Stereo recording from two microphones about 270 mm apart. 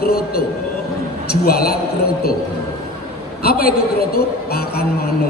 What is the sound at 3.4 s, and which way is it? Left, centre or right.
A man's voice, left.